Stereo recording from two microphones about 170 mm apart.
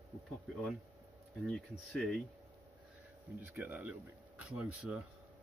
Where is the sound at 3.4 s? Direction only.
10° right (ahead or behind).